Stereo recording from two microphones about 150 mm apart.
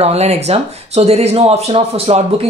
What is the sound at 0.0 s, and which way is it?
Speech, 45° right (ahead or behind).